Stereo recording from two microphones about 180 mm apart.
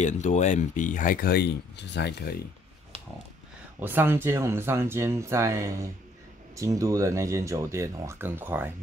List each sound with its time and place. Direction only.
0.0 s speech: 40° left (ahead or behind); by 2.3 s 70° left (ahead or behind)
3.8 s speech: 10° right (ahead or behind)